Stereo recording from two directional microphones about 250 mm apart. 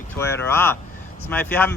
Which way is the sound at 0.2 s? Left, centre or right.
Centre.